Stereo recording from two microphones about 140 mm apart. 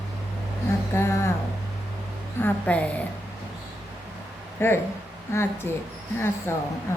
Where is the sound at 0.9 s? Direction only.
20° left (ahead or behind).